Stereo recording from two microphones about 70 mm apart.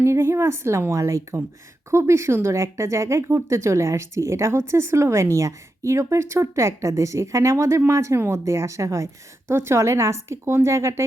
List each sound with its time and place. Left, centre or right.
0.0 s a woman's voice: right